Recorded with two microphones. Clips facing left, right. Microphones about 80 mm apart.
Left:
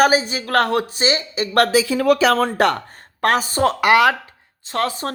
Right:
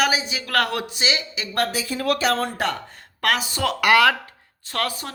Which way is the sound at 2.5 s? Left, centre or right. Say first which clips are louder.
Left 8 dB; left.